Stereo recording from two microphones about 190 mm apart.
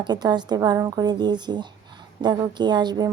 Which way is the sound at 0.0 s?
20° right (ahead or behind).